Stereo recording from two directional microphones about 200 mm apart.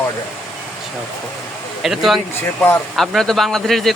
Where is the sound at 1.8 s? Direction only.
Centre (ahead or behind).